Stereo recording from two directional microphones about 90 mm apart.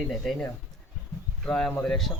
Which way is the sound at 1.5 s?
5° left (ahead or behind).